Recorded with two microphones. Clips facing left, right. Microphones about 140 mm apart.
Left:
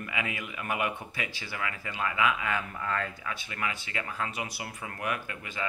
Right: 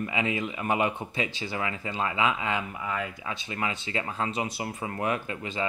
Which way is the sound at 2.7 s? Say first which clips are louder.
Right 1 dB; 10° right (ahead or behind).